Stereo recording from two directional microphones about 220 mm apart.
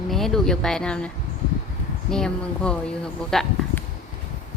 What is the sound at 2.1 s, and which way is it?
Speech, 5° left (ahead or behind).